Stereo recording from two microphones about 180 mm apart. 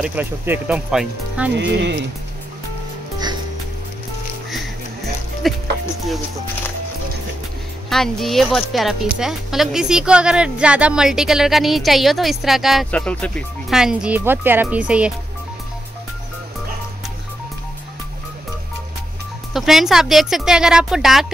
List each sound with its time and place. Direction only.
0.0 s speech: 10° right (ahead or behind)
1.6 s speech: 75° right (ahead or behind)
5.4 s speech: centre (ahead or behind)
7.9 s speech: centre (ahead or behind)
19.5 s speech: centre (ahead or behind)